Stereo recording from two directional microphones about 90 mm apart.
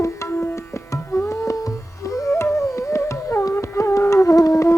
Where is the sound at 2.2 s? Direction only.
30° left (ahead or behind).